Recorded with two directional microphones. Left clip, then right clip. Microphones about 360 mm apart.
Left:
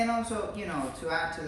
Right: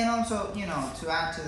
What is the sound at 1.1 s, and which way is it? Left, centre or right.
Speech, right.